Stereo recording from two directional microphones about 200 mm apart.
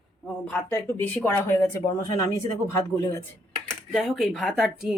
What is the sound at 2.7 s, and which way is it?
Speech, 15° left (ahead or behind).